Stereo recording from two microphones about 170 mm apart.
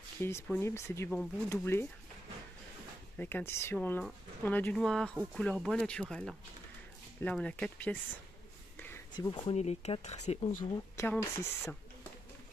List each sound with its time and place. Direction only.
0.2 s speech: 15° left (ahead or behind)
3.2 s speech: 10° left (ahead or behind)
8.7 s a sound: 10° left (ahead or behind)
9.1 s speech: 25° left (ahead or behind)
9.4 s speech: 40° left (ahead or behind)
11.0 s speech: 15° left (ahead or behind)